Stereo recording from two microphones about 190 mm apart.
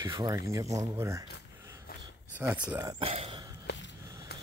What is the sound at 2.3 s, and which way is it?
Speech, 5° right (ahead or behind).